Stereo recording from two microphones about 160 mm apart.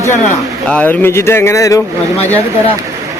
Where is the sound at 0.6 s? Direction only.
10° left (ahead or behind).